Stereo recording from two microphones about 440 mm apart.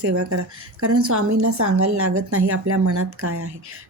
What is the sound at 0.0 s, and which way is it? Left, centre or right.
A woman's voice, right.